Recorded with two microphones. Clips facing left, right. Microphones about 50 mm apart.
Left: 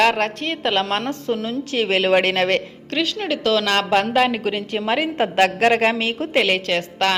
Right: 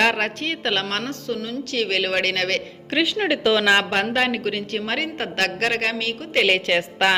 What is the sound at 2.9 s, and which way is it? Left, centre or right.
Speech, centre.